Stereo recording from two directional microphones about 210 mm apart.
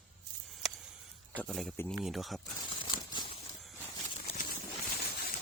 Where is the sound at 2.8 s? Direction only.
20° left (ahead or behind).